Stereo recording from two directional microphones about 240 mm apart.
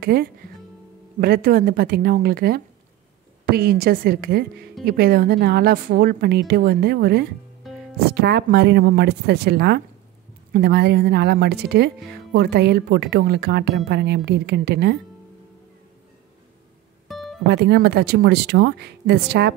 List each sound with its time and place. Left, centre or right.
0.0 s a woman's voice: right
7.7 s music: centre
8.1 s speech: right
17.1 s music: centre
17.5 s speech: right